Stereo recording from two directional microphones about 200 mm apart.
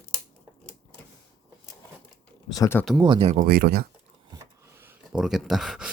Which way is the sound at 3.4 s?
50° right (ahead or behind).